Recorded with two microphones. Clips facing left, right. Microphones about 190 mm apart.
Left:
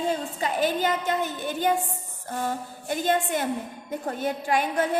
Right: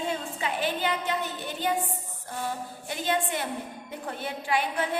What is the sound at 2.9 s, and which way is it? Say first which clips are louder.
A woman's voice: left 4 dB; 45° left (ahead or behind).